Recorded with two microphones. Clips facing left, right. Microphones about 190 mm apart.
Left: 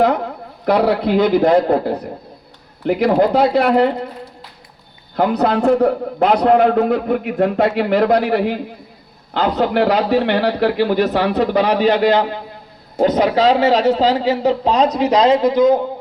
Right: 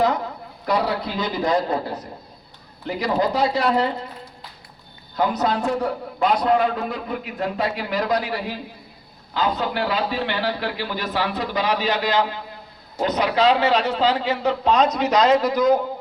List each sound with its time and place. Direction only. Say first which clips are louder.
0.0 s a man's voice: left 5 dB; 55° left (ahead or behind)
5.1 s a man's voice: left 6 dB; 60° left (ahead or behind); by 15.8 s 25° left (ahead or behind)